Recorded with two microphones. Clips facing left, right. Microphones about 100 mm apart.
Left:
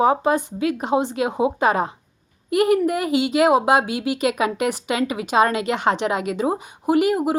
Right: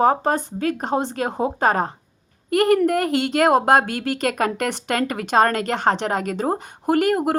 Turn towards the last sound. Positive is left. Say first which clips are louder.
# even
turn(degrees=-50)  # may be behind; listen again after turning